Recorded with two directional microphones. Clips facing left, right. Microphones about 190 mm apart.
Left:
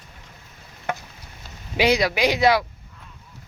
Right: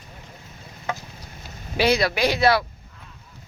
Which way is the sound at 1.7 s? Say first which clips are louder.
Left 1 dB; 15° left (ahead or behind).